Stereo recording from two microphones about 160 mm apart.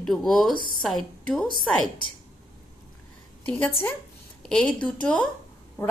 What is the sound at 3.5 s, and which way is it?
A woman's voice, 10° left (ahead or behind).